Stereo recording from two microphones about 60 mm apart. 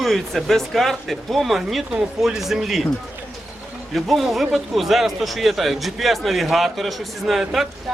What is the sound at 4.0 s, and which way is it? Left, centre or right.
A man's voice, centre.